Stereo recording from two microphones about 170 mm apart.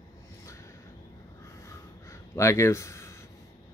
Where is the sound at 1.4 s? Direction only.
15° left (ahead or behind).